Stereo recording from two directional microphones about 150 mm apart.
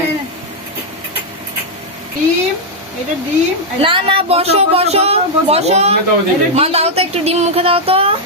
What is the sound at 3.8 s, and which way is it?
Speech, 35° right (ahead or behind).